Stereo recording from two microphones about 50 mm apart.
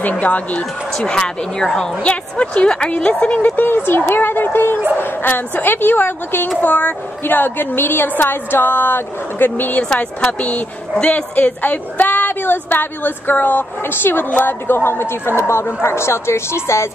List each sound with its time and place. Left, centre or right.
0.1 s a woman's voice: left
0.9 s speech: centre
2.0 s a woman's voice: left
3.1 s a woman's voice: left
11.0 s a woman's voice: left